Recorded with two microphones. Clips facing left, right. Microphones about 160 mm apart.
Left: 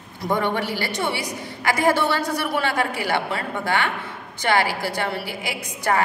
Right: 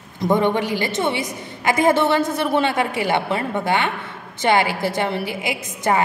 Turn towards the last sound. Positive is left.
turn(degrees=-20)  # may be behind; listen again after turning